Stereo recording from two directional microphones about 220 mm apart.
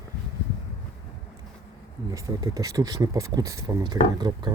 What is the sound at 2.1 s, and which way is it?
Speech, 15° right (ahead or behind).